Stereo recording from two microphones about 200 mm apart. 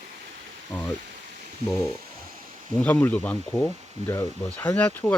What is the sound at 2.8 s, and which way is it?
Speech, 10° left (ahead or behind).